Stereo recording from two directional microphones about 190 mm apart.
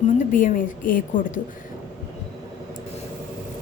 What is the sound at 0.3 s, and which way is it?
A woman's voice, 45° left (ahead or behind).